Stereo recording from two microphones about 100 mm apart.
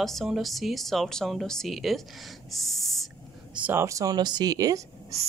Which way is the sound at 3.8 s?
35° right (ahead or behind).